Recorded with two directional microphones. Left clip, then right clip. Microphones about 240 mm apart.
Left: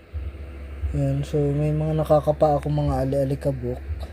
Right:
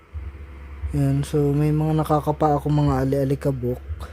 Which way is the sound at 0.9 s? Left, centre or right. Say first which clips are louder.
Right 2 dB; right.